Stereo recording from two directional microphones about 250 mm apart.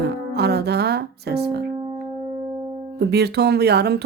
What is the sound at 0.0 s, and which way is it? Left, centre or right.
Music, right.